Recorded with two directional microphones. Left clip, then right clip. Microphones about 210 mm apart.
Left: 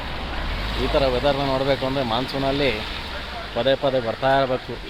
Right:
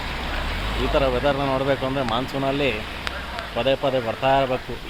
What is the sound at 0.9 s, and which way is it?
Speech, 5° left (ahead or behind).